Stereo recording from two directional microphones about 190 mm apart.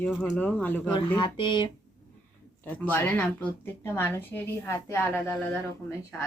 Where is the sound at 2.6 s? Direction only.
10° left (ahead or behind).